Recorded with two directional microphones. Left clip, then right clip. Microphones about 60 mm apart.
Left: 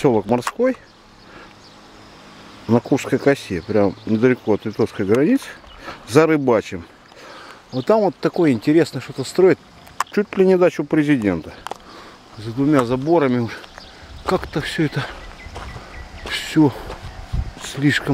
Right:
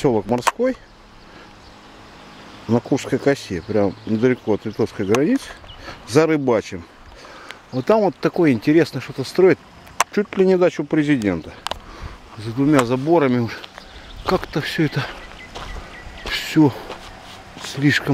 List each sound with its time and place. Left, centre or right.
0.0 s speech: left
2.7 s speech: left
7.8 s speech: centre
10.1 s speech: centre
12.0 s speech: centre
16.3 s a sound: centre
17.7 s speech: centre